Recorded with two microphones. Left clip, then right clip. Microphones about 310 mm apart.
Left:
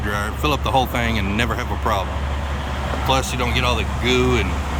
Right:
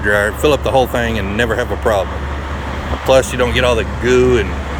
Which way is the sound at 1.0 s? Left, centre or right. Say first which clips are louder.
Right 5 dB; centre.